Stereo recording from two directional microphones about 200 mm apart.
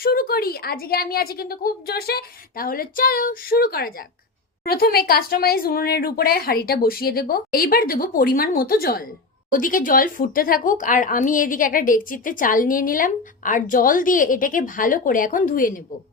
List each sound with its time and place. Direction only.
0.0 s speech: 50° left (ahead or behind)